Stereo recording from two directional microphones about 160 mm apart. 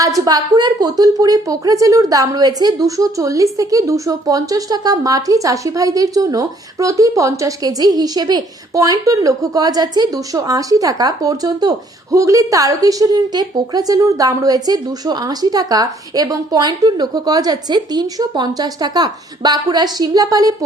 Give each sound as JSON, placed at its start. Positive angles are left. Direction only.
{"t": 0.0, "sound": "a woman's voice", "side_deg": -20}